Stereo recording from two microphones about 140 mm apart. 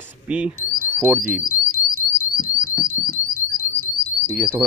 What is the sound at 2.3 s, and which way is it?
Alarm, 85° left.